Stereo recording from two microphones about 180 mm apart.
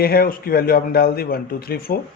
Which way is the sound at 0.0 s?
55° left (ahead or behind).